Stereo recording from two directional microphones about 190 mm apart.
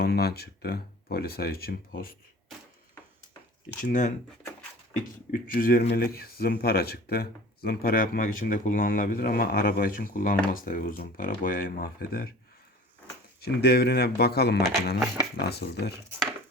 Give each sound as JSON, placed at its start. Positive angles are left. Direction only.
{"t": 0.0, "sound": "speech", "side_deg": 55}
{"t": 3.8, "sound": "speech", "side_deg": 45}
{"t": 5.3, "sound": "speech", "side_deg": 50}
{"t": 13.4, "sound": "speech", "side_deg": 55}
{"t": 14.9, "sound": "speech", "side_deg": -10}
{"t": 15.4, "sound": "speech", "side_deg": 60}